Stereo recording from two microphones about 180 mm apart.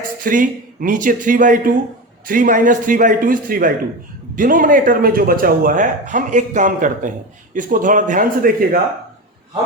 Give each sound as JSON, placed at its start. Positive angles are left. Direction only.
{"t": 0.3, "sound": "speech", "side_deg": -50}